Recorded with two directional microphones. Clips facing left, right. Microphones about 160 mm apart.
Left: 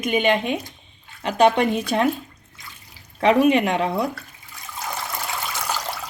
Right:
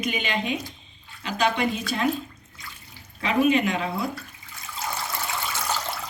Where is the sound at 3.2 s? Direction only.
65° left (ahead or behind).